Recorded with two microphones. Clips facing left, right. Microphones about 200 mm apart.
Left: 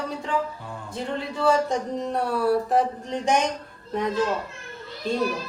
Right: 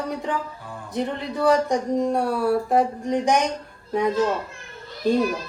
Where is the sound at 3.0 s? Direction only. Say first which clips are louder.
Right 4 dB; 15° right (ahead or behind).